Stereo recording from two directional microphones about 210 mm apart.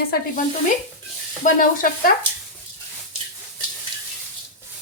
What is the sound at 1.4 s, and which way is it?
Speech, 40° left (ahead or behind).